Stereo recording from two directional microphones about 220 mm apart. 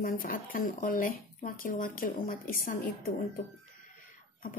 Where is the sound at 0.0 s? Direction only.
40° left (ahead or behind).